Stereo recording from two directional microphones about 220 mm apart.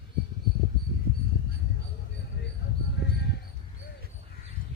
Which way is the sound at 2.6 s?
50° left (ahead or behind).